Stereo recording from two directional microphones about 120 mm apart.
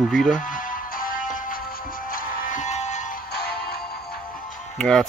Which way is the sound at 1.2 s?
90° left.